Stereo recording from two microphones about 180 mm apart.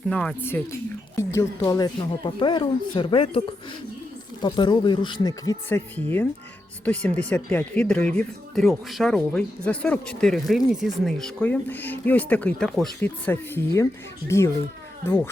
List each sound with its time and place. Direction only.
0.1 s speech: 5° left (ahead or behind)